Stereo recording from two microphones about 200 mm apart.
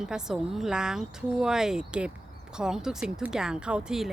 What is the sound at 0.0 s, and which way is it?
Speech, 5° right (ahead or behind).